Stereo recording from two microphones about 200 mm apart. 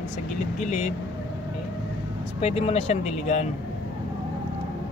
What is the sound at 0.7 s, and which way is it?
Speech, 35° left (ahead or behind).